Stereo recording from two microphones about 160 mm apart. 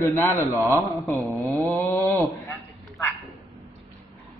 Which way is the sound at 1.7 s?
10° left (ahead or behind).